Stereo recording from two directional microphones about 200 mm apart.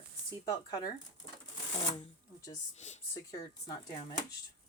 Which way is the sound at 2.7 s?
35° left (ahead or behind).